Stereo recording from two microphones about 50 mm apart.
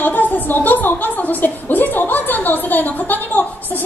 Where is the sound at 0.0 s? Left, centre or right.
Left.